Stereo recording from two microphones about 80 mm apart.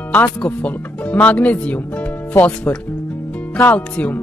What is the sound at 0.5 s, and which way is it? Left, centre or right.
Speech, centre.